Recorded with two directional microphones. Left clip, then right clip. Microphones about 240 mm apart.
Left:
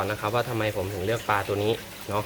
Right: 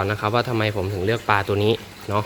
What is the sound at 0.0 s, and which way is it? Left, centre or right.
Speech, right.